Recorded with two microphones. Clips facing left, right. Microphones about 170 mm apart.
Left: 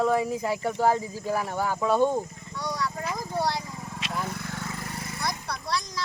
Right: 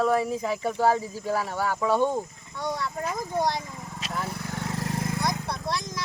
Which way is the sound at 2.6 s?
25° right (ahead or behind).